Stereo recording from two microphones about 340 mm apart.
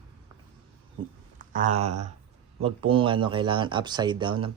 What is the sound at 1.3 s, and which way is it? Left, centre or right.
Speech, right.